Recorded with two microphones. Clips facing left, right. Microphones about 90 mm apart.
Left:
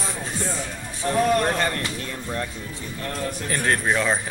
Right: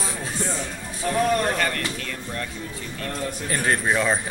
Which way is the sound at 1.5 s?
25° left (ahead or behind).